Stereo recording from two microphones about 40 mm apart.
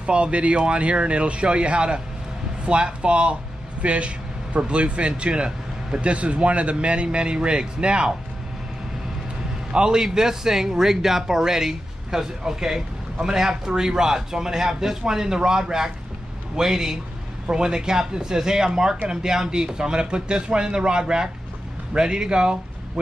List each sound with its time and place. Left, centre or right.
0.0 s a man's voice: right
9.7 s a man's voice: centre